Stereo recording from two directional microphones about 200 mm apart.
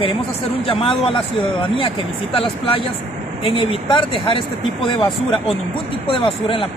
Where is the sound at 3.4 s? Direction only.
25° left (ahead or behind).